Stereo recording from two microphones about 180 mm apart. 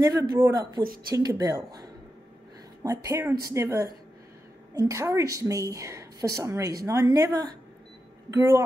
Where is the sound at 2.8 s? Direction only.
15° right (ahead or behind).